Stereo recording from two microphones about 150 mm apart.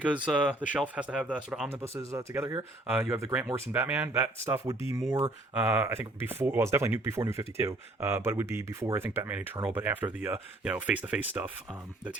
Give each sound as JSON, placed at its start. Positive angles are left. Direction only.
{"t": 0.0, "sound": "speech", "side_deg": -10}
{"t": 1.8, "sound": "speech", "side_deg": -20}